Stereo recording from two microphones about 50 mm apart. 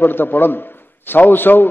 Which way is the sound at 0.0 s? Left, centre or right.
Left.